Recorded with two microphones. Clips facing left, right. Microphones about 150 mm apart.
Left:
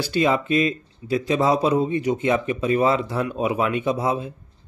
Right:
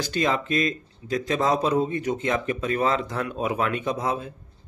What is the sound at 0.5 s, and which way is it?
Speech, 40° right (ahead or behind).